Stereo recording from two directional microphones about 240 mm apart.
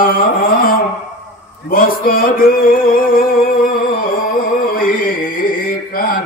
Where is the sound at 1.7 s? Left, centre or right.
Left.